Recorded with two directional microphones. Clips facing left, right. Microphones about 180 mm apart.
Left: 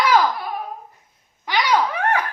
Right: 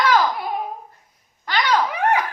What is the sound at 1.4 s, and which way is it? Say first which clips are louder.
Dog: left 1 dB; 10° left (ahead or behind).